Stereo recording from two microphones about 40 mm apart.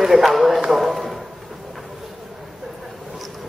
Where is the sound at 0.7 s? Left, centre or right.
Centre.